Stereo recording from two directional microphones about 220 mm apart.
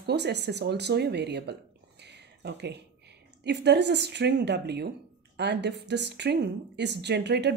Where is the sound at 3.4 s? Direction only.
50° right (ahead or behind).